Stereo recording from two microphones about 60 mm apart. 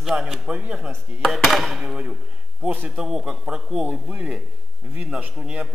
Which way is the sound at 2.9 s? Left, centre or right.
Centre.